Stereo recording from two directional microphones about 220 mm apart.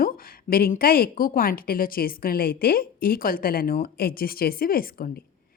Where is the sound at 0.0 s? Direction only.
40° left (ahead or behind).